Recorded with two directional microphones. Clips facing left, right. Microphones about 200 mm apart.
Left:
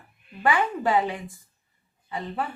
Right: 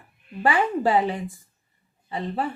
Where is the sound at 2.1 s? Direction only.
30° right (ahead or behind).